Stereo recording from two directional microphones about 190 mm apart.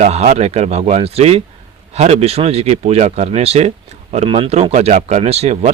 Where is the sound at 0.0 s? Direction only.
35° right (ahead or behind).